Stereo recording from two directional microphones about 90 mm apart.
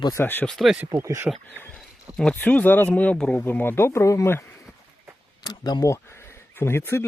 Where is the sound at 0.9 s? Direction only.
30° right (ahead or behind).